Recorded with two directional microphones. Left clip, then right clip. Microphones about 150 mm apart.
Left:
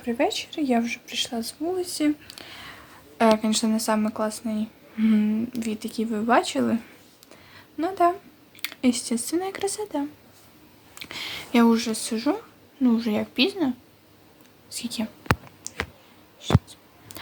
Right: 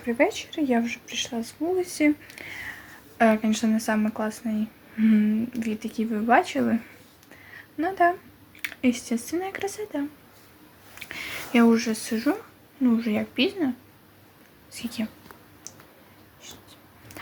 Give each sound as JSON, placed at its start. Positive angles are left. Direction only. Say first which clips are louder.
{"t": 0.0, "sound": "speech", "louder": "right 1 dB", "side_deg": 35}
{"t": 12.8, "sound": "speech", "louder": "left 1 dB", "side_deg": 40}
{"t": 14.7, "sound": "whispering", "louder": "left 2 dB", "side_deg": 35}